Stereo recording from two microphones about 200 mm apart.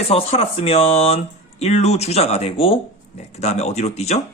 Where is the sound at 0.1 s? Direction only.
30° left (ahead or behind).